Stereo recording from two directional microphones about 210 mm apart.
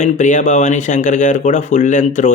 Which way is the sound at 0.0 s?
35° left (ahead or behind).